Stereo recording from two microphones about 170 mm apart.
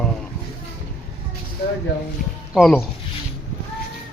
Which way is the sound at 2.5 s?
Centre (ahead or behind).